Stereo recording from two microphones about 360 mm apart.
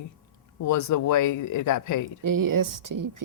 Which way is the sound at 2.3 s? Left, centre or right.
Right.